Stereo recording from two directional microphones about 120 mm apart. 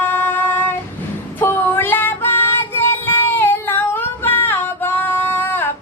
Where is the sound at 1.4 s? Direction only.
20° left (ahead or behind).